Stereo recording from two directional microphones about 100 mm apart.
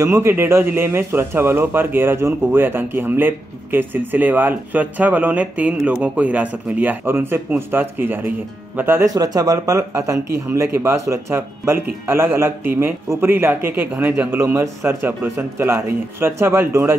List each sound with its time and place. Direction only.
0.0 s speech: 25° right (ahead or behind)
9.0 s speech: 40° right (ahead or behind)